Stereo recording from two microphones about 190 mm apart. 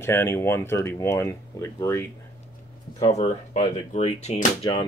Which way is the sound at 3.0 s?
35° left (ahead or behind).